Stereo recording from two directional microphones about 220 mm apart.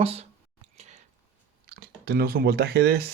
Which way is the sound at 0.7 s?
30° right (ahead or behind).